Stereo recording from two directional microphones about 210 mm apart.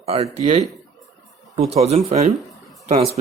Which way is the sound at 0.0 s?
30° right (ahead or behind).